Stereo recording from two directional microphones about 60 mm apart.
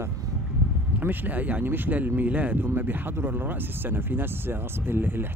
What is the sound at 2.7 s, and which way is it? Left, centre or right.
Speech, right.